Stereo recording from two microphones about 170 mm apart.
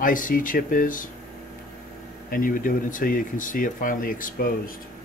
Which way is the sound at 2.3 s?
55° left (ahead or behind).